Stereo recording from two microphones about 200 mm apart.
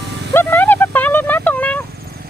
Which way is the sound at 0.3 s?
10° left (ahead or behind).